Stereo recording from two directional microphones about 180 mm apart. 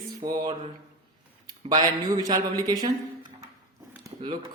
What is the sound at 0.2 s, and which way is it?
Speech, 20° right (ahead or behind).